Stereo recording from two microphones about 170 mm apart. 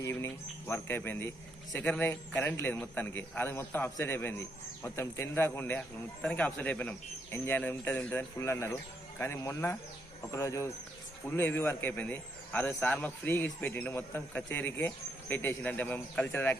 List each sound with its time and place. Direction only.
0.0 s a man's voice: 15° left (ahead or behind)